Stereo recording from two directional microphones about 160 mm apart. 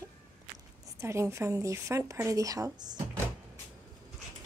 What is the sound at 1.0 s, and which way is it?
Speech, 15° right (ahead or behind).